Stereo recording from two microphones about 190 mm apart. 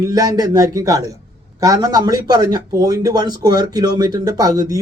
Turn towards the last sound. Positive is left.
turn(degrees=-20)  # may be behind; listen again after turning